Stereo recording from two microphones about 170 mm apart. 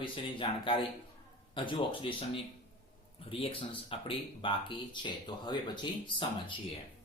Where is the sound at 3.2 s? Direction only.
30° left (ahead or behind).